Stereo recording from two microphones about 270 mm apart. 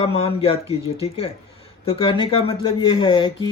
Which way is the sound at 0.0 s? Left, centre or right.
Left.